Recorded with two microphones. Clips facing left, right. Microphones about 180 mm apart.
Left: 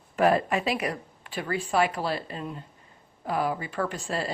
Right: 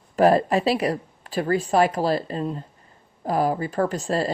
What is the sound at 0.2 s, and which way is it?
Speech, 35° right (ahead or behind).